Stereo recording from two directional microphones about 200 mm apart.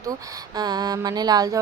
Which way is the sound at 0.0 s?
20° right (ahead or behind).